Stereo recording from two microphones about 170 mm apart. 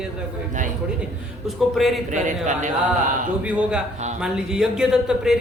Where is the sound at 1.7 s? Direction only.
Centre (ahead or behind).